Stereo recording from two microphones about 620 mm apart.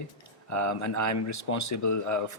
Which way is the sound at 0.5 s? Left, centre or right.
Left.